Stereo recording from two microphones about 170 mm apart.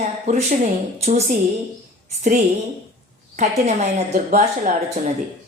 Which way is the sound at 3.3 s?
45° right (ahead or behind).